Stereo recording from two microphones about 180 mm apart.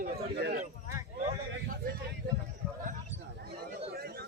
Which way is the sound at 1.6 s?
55° right (ahead or behind).